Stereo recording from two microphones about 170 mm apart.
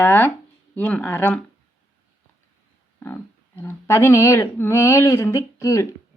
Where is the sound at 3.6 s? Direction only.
15° left (ahead or behind).